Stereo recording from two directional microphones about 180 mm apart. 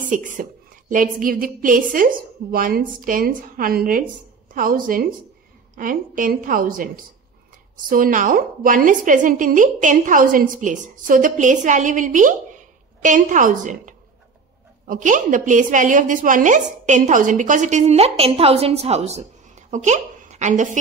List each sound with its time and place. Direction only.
0.0 s a woman's voice: 45° right (ahead or behind)